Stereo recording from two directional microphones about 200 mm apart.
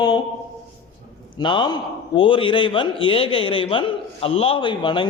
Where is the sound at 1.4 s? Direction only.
20° left (ahead or behind).